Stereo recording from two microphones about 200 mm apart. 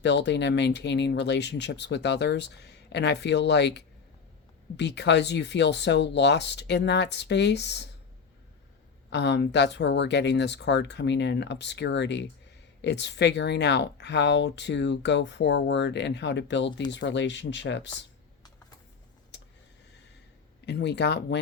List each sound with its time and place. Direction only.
0.0 s speech: 60° left (ahead or behind)
9.0 s speech: 60° left (ahead or behind)
20.7 s speech: 60° left (ahead or behind)